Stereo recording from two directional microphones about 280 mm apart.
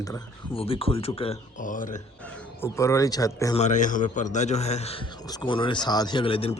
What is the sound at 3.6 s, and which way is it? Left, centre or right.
A man's voice, left.